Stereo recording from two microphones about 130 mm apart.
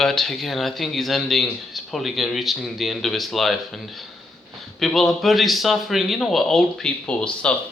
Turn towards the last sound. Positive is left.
turn(degrees=10)  # may be behind; listen again after turning